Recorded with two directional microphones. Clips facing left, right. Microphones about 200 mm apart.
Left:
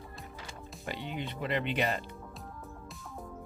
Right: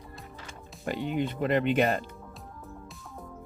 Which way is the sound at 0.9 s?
50° right (ahead or behind).